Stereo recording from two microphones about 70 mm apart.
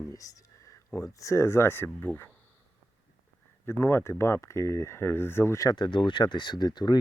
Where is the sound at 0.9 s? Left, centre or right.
Left.